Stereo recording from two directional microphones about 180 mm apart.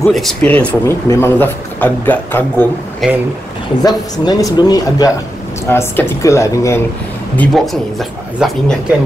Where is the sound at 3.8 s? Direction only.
20° left (ahead or behind).